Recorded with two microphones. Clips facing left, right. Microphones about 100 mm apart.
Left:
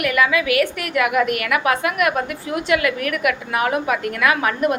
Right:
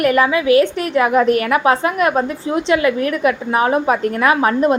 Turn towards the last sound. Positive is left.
turn(degrees=-30)  # may be behind; listen again after turning